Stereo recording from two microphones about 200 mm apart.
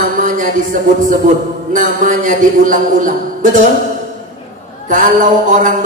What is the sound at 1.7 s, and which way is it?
A woman's voice, 40° right (ahead or behind).